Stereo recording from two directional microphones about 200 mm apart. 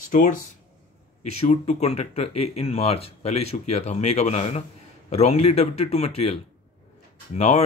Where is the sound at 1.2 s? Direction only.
35° left (ahead or behind).